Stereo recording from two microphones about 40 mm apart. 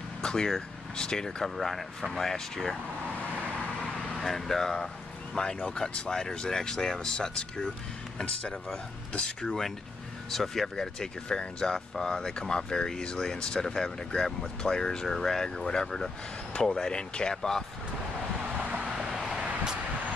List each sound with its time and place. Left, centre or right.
0.2 s vehicle: centre
0.5 s speech: centre
1.4 s speech: centre
4.1 s speech: centre; by 8.5 s left
9.2 s speech: centre
10.3 s speech: centre
11.0 s speech: centre
18.6 s vehicle: right
18.9 s vehicle: centre